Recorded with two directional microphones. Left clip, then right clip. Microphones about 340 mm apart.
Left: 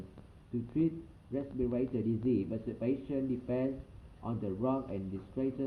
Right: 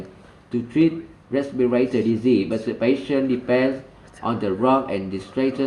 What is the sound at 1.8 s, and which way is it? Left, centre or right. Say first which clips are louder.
Speech: right 14 dB; right.